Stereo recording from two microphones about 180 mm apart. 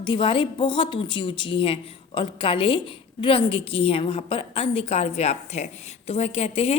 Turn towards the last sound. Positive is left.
turn(degrees=35)  # may be behind; listen again after turning